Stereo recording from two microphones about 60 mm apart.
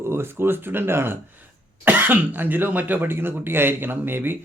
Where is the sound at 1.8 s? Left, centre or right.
Right.